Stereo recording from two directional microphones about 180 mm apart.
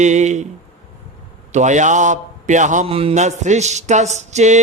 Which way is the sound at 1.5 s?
40° right (ahead or behind).